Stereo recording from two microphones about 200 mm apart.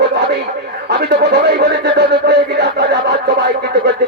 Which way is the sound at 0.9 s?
55° right (ahead or behind).